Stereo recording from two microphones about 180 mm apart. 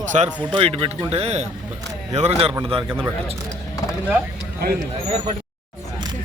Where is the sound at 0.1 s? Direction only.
40° right (ahead or behind).